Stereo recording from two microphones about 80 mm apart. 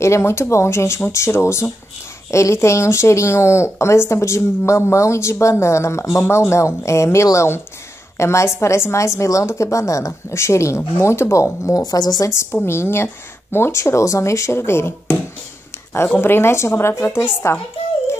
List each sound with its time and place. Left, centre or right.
0.0 s a woman's voice: left
11.8 s speech: left
12.6 s a woman's voice: left
16.2 s a woman's voice: left